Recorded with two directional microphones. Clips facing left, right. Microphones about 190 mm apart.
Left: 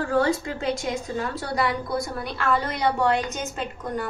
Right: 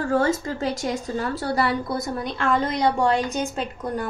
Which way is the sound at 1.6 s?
30° right (ahead or behind).